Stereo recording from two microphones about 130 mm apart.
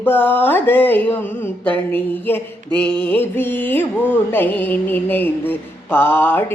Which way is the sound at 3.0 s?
15° left (ahead or behind).